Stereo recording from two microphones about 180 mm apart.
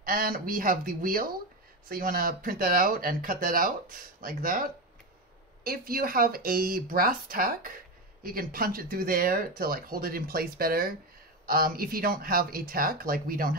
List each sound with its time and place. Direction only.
0.0 s speech: 55° right (ahead or behind)